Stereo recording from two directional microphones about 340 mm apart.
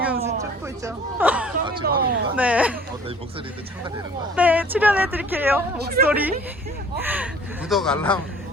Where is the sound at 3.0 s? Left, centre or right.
Centre.